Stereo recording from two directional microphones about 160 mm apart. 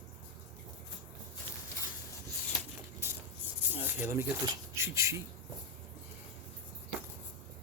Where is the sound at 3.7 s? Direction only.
10° right (ahead or behind).